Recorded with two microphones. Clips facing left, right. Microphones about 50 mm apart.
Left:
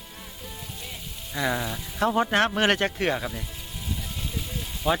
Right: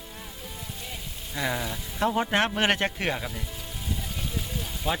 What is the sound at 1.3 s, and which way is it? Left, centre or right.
Speech, centre.